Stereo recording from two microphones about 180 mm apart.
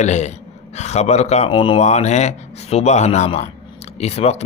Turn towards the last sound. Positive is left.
turn(degrees=35)  # may be behind; listen again after turning